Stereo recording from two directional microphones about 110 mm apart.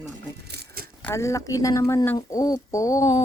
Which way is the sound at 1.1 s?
30° left (ahead or behind).